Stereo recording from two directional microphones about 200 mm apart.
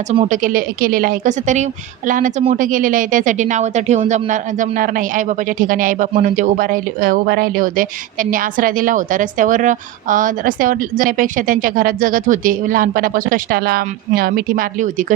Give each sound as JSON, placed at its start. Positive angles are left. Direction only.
{"t": 0.2, "sound": "a woman's voice", "side_deg": -40}